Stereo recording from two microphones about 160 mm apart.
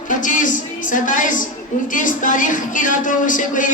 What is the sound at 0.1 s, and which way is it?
A man's voice, 55° left (ahead or behind).